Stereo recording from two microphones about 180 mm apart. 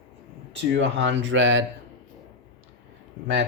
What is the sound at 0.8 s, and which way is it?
Speech, 90° right.